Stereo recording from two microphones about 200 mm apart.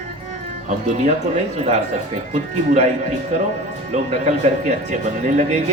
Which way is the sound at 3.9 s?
35° right (ahead or behind).